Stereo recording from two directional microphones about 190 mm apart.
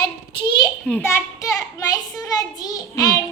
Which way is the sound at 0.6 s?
5° left (ahead or behind).